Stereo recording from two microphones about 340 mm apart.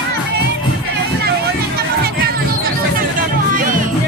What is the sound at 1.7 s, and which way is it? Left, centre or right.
Music, right.